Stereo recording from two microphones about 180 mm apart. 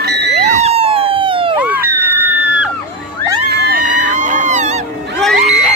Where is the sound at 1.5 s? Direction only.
10° right (ahead or behind).